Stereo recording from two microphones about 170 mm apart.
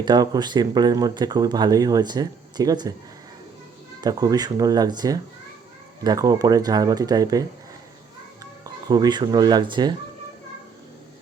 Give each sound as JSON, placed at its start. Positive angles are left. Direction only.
{"t": 0.0, "sound": "speech", "side_deg": -25}
{"t": 4.0, "sound": "speech", "side_deg": -20}
{"t": 8.6, "sound": "speech", "side_deg": -25}